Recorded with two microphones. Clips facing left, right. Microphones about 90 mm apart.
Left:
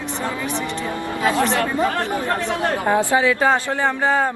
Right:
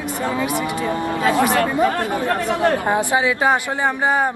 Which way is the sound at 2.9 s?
20° right (ahead or behind).